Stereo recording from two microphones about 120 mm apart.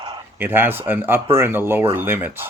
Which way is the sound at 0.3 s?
15° right (ahead or behind).